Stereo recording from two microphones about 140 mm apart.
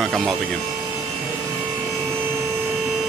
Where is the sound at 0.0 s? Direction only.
Centre (ahead or behind).